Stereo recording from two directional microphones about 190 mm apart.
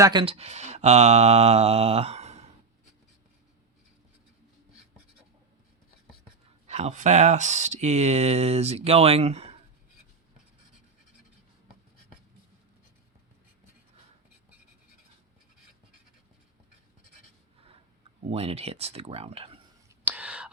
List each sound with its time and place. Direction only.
0.0 s speech: 25° right (ahead or behind)
6.7 s speech: 35° right (ahead or behind)
18.3 s speech: 30° right (ahead or behind)
19.9 s whispering: 10° right (ahead or behind)